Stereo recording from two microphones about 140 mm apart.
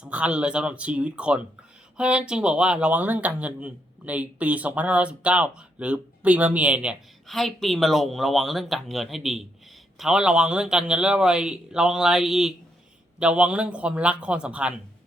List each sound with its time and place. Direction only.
0.0 s speech: 10° right (ahead or behind)